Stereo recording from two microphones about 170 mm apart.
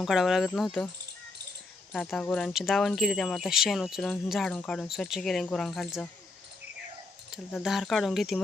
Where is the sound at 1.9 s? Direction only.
5° left (ahead or behind).